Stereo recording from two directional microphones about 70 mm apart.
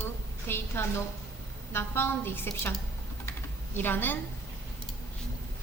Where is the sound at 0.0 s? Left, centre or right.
Left.